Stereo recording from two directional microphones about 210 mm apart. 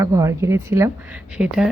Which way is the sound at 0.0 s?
15° right (ahead or behind).